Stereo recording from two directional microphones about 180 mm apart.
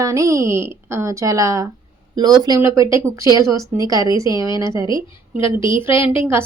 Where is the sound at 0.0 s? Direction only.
15° right (ahead or behind).